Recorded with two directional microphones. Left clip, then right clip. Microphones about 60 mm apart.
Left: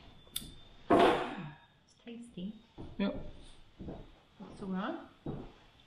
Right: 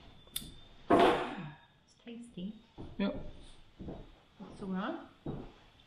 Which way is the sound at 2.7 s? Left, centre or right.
Centre.